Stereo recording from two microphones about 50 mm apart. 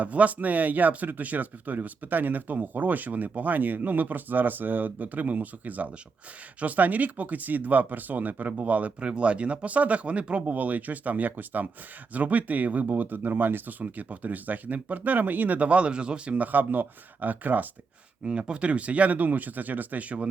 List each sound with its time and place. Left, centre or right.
0.0 s speech: right
18.3 s speech: centre